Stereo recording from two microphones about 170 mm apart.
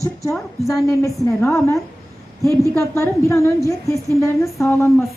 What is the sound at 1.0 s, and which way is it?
A woman's voice, 15° left (ahead or behind).